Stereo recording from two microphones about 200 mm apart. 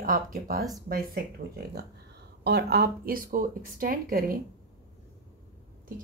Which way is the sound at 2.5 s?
55° right (ahead or behind).